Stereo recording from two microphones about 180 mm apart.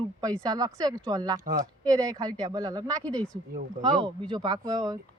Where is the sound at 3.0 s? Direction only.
5° left (ahead or behind).